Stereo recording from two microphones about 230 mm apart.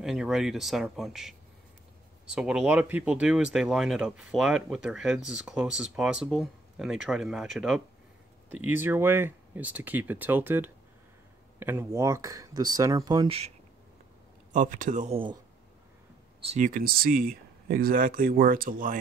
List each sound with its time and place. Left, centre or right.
0.0 s speech: centre; by 13.5 s right
14.5 s speech: right
16.4 s speech: right